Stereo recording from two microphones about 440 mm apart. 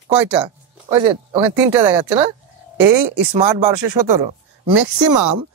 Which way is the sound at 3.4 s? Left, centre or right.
Right.